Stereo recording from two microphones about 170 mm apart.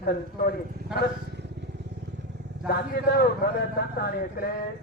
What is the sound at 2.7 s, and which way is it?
Speech, 70° left (ahead or behind).